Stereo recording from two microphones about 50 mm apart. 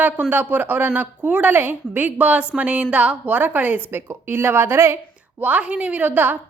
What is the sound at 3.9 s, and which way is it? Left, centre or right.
A woman's voice, right.